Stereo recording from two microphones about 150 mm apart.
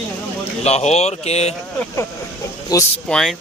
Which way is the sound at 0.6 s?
45° left (ahead or behind).